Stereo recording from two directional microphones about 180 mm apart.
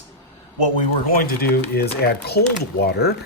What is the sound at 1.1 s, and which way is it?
Speech, 60° left (ahead or behind).